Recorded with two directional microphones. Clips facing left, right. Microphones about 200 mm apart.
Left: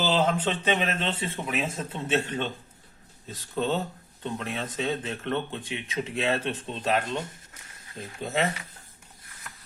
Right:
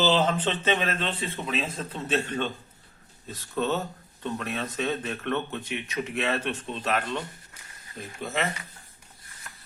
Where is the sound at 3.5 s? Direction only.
30° left (ahead or behind).